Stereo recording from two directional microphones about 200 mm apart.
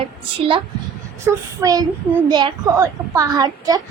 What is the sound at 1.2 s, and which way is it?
A child's voice, 15° right (ahead or behind).